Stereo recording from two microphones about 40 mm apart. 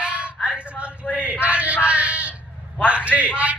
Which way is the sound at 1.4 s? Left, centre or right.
Right.